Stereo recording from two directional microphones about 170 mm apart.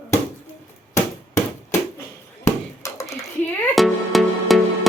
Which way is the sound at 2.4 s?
20° left (ahead or behind).